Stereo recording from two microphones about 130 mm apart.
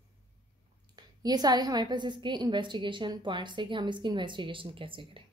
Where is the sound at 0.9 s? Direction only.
30° right (ahead or behind).